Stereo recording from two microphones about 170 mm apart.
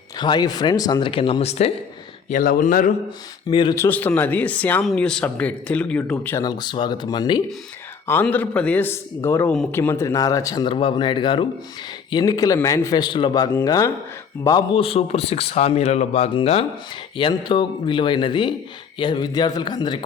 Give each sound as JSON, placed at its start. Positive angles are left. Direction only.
{"t": 0.2, "sound": "speech", "side_deg": 25}
{"t": 2.3, "sound": "speech", "side_deg": 55}
{"t": 3.5, "sound": "speech", "side_deg": 25}
{"t": 3.8, "sound": "a man's voice", "side_deg": 10}
{"t": 6.4, "sound": "speech", "side_deg": 25}
{"t": 8.0, "sound": "a man's voice", "side_deg": 10}
{"t": 14.8, "sound": "speech", "side_deg": 35}